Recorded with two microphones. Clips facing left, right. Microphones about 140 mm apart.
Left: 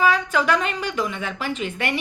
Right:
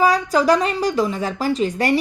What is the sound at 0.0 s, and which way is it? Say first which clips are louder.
A woman's voice: right 4 dB; 35° right (ahead or behind).